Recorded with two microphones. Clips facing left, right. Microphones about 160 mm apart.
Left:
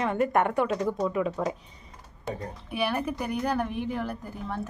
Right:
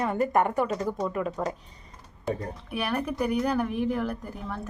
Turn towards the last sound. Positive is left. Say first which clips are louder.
# even
turn(degrees=0)  # may be behind; listen again after turning